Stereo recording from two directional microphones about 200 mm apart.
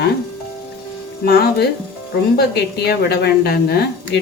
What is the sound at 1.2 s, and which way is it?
A woman's voice, 50° left (ahead or behind).